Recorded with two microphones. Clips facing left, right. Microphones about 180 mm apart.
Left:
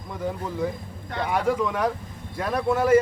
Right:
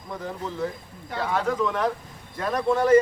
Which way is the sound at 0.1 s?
10° left (ahead or behind).